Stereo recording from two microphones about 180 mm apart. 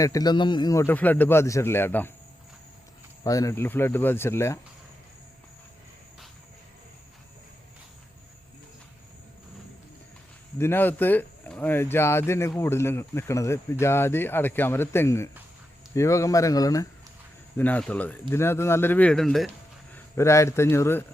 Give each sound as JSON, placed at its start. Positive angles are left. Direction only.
{"t": 0.0, "sound": "speech", "side_deg": 20}
{"t": 3.2, "sound": "speech", "side_deg": 20}
{"t": 10.6, "sound": "speech", "side_deg": 10}
{"t": 17.6, "sound": "speech", "side_deg": 10}
{"t": 20.1, "sound": "speech", "side_deg": 15}